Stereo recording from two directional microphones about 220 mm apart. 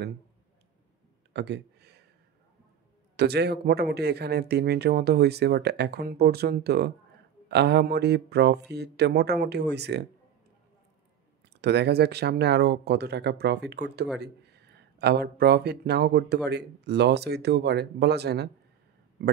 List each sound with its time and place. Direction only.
1.3 s a sound: 50° right (ahead or behind)
3.2 s speech: 50° right (ahead or behind)
11.6 s speech: 50° right (ahead or behind)